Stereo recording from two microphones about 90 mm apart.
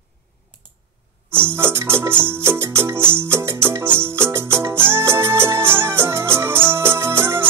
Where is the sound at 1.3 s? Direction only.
25° right (ahead or behind).